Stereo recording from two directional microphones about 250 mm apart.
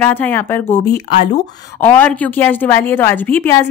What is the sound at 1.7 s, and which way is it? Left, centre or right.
A woman's voice, centre.